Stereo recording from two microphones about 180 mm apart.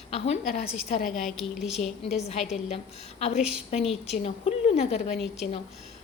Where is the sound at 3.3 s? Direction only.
5° right (ahead or behind).